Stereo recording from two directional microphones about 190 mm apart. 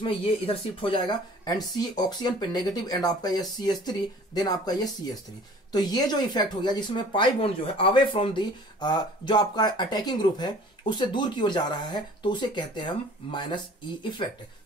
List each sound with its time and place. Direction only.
0.7 s speech: 25° left (ahead or behind)